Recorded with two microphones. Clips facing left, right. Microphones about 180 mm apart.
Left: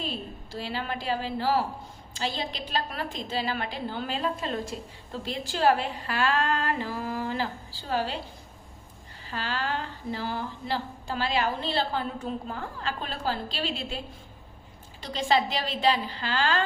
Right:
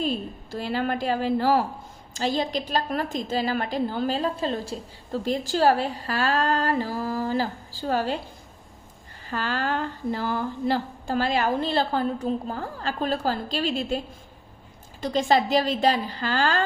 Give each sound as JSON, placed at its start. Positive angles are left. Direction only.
{"t": 0.0, "sound": "a woman's voice", "side_deg": -50}
{"t": 9.3, "sound": "a woman's voice", "side_deg": -50}
{"t": 15.0, "sound": "a woman's voice", "side_deg": -45}